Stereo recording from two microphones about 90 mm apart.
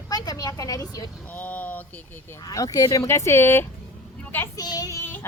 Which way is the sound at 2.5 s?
40° left (ahead or behind).